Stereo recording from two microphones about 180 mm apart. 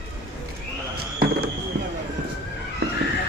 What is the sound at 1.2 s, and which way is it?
Fireworks, 60° right (ahead or behind).